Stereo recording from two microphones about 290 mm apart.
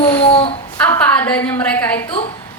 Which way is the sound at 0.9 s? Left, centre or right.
Centre.